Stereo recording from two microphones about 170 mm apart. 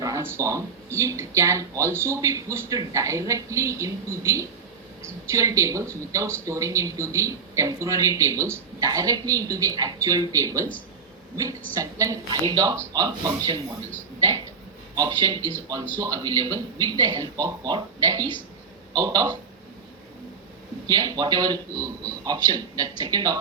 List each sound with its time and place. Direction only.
0.0 s speech: 15° right (ahead or behind)
11.7 s speech: 20° right (ahead or behind)
15.4 s speech: 10° left (ahead or behind)
16.0 s speech: 20° right (ahead or behind)
20.8 s speech: 25° right (ahead or behind)